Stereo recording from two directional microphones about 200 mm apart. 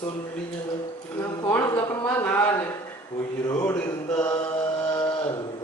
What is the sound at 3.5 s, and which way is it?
Speech, 15° left (ahead or behind).